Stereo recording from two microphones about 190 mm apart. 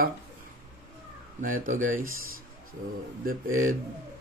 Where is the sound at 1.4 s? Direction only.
45° right (ahead or behind).